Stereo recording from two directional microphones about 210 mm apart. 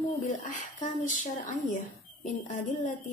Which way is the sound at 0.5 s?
35° left (ahead or behind).